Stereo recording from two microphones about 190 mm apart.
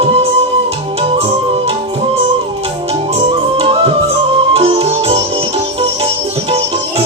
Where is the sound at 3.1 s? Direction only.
30° right (ahead or behind).